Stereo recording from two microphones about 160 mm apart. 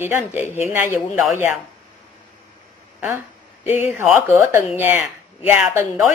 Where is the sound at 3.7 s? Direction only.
15° right (ahead or behind).